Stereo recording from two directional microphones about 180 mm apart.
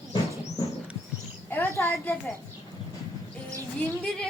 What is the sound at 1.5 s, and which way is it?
Speech, 10° left (ahead or behind).